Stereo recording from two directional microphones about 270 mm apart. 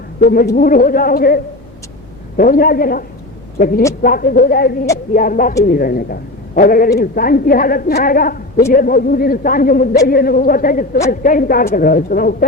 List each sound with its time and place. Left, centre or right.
0.2 s a woman's voice: left